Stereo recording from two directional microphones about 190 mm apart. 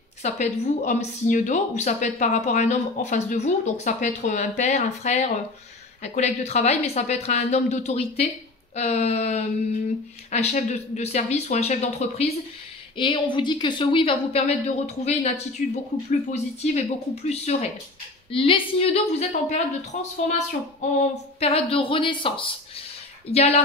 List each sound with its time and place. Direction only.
0.2 s a woman's voice: 40° left (ahead or behind)